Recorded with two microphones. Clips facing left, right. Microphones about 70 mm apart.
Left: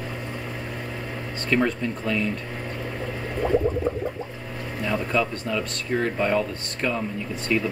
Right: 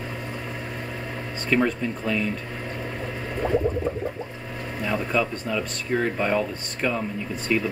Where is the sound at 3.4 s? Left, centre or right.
Right.